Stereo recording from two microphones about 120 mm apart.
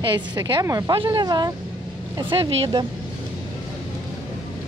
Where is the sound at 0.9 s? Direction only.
40° right (ahead or behind).